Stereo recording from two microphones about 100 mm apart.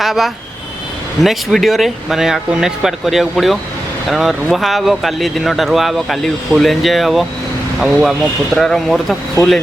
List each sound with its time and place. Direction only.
0.0 s speech: centre (ahead or behind)
9.4 s speech: 35° left (ahead or behind)